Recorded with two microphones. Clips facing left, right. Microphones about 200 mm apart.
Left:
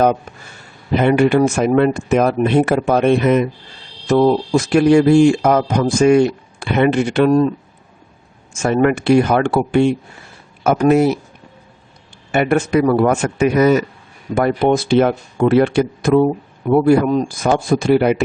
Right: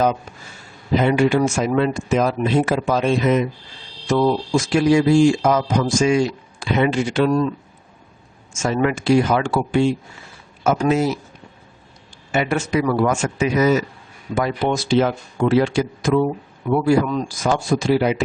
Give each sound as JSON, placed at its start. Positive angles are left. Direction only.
{"t": 0.0, "sound": "speech", "side_deg": 55}
{"t": 8.5, "sound": "speech", "side_deg": 55}
{"t": 12.3, "sound": "speech", "side_deg": 55}
{"t": 16.1, "sound": "speech", "side_deg": 40}